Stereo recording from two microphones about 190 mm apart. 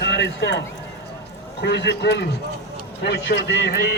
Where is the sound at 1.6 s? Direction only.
65° left (ahead or behind).